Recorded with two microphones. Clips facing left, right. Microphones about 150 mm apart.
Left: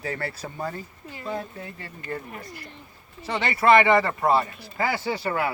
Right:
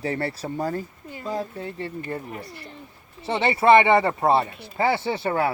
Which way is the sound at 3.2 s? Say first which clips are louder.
Right 3 dB; 25° right (ahead or behind).